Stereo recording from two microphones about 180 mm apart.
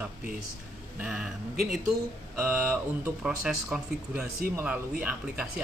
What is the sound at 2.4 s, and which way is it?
Speech, 10° right (ahead or behind).